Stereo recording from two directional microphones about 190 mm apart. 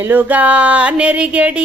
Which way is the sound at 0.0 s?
10° right (ahead or behind).